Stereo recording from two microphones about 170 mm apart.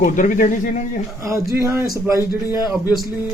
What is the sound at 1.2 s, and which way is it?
Speech, 15° right (ahead or behind).